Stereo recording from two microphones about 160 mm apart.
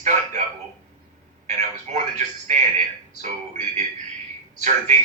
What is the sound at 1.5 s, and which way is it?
Television, 45° right (ahead or behind).